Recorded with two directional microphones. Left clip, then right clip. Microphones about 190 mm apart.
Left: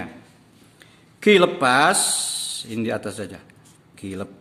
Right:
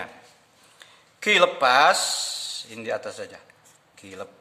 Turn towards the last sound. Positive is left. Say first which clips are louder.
# left 5 dB
turn(degrees=10)  # may be behind; listen again after turning